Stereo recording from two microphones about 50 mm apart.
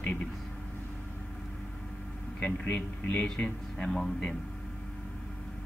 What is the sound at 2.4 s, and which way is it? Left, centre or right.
Speech, left.